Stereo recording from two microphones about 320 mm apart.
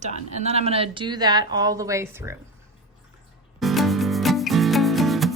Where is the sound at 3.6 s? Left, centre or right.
Centre.